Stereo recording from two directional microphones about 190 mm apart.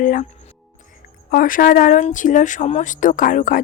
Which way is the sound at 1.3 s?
45° left (ahead or behind).